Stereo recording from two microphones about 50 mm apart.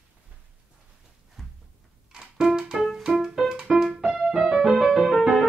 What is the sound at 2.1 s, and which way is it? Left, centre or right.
Music, centre.